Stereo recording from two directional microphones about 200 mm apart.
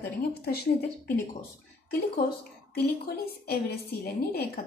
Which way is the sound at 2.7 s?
50° left (ahead or behind).